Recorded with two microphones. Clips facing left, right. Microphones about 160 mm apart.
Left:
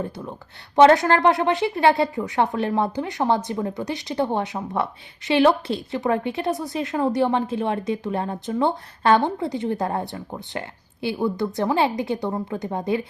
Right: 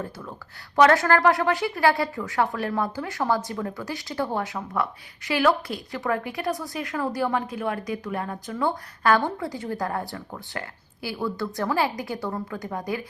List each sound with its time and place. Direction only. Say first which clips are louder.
0.0 s speech: left 4 dB; 20° left (ahead or behind)